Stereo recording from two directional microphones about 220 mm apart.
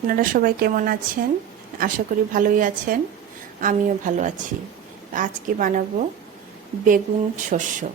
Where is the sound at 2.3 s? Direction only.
35° right (ahead or behind).